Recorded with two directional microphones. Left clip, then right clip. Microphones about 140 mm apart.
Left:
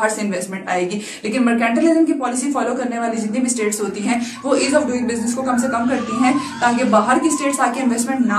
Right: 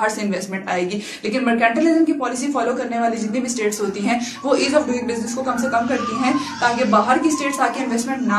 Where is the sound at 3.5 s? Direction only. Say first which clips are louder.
Even; 30° right (ahead or behind).